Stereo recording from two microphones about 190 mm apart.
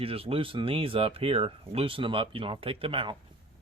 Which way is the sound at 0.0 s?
30° right (ahead or behind).